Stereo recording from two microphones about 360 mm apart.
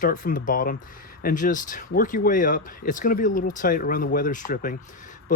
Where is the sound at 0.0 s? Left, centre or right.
Left.